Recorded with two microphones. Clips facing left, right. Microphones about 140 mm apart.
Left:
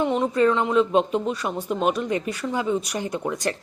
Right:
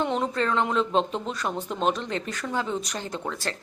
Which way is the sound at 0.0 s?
5° left (ahead or behind).